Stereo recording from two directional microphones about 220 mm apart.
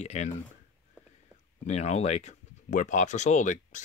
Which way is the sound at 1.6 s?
30° left (ahead or behind).